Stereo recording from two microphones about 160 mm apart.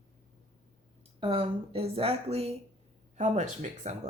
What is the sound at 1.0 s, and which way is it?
Speech, 35° right (ahead or behind).